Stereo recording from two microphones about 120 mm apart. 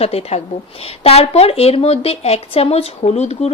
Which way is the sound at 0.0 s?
55° left (ahead or behind).